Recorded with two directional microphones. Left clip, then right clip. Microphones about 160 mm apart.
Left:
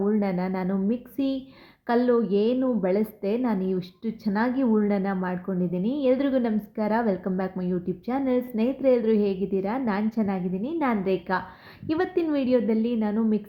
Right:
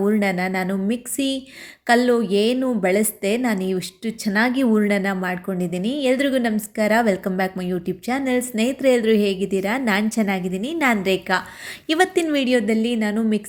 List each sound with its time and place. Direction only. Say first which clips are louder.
0.2 s a woman's voice: right 6 dB; 20° right (ahead or behind)